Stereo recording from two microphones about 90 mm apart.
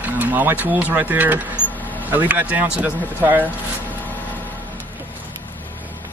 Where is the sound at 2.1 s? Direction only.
20° right (ahead or behind).